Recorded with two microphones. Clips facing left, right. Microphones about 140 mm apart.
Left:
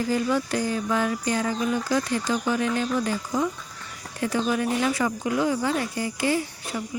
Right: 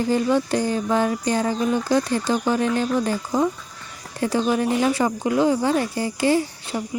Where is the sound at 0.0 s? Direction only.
30° right (ahead or behind).